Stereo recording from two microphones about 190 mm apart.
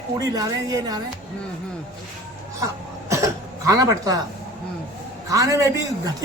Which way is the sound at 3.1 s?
15° right (ahead or behind).